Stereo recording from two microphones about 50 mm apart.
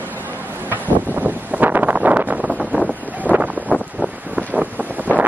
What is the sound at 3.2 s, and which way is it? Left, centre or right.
Wind, right.